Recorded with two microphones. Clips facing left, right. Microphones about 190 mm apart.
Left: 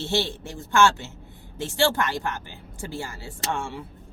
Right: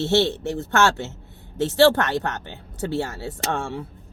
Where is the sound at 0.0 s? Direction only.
65° right (ahead or behind).